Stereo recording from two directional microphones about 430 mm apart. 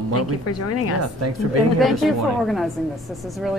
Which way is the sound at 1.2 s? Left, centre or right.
Right.